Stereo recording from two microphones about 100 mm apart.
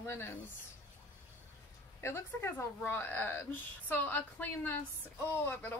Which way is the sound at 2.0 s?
25° left (ahead or behind).